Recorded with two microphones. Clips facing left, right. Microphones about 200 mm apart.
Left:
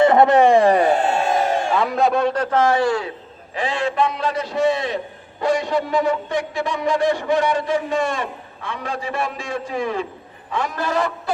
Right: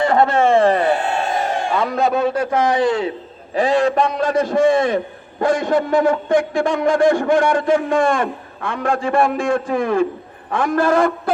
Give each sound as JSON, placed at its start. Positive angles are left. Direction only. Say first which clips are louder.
{"t": 0.0, "sound": "speech", "louder": "left 2 dB", "side_deg": 20}
{"t": 1.7, "sound": "a man's voice", "louder": "right 2 dB", "side_deg": 0}
{"t": 3.5, "sound": "a man's voice", "louder": "right 7 dB", "side_deg": -40}